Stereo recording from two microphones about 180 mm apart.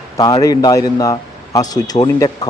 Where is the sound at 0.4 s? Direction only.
20° left (ahead or behind).